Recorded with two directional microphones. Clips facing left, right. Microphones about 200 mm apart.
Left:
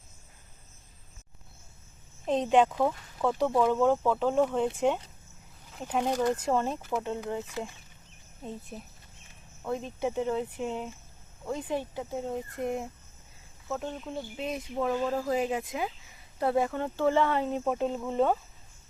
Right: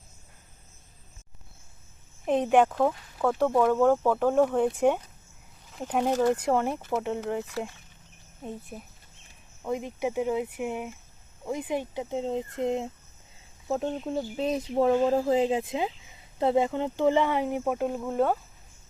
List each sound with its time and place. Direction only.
2.2 s speech: 10° right (ahead or behind); by 3.8 s 5° left (ahead or behind)
3.8 s speech: 10° right (ahead or behind)
8.7 s speech: 5° right (ahead or behind)
13.7 s speech: 35° right (ahead or behind); by 18.3 s 5° right (ahead or behind)